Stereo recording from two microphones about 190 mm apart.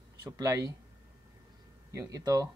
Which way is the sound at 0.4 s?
20° right (ahead or behind).